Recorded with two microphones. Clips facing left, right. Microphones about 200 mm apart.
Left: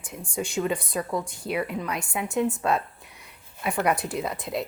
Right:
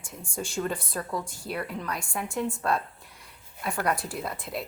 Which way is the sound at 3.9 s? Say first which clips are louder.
Left 4 dB; 20° left (ahead or behind).